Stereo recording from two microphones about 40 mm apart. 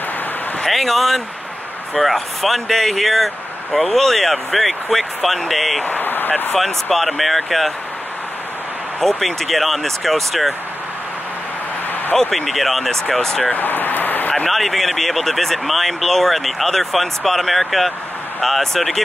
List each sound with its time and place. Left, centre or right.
0.7 s speech: centre
5.9 s speech: left
6.5 s speech: centre
9.0 s speech: centre
12.2 s speech: centre
13.6 s speech: left
14.3 s speech: centre